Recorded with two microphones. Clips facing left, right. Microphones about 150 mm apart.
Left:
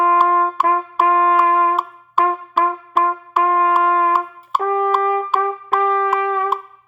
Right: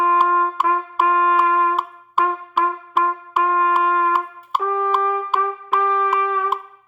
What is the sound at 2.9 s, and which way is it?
Wind instrument, 50° left (ahead or behind).